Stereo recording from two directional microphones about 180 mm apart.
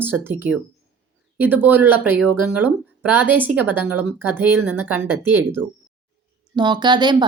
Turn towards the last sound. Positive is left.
turn(degrees=-25)  # may be behind; listen again after turning